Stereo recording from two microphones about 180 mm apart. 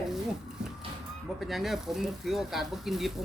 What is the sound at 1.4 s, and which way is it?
Speech, centre (ahead or behind).